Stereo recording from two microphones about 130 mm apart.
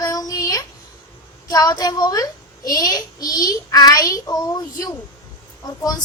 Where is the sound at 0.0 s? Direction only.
30° left (ahead or behind).